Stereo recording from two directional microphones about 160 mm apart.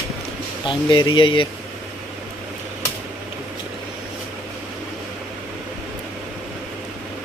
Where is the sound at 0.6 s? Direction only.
30° left (ahead or behind).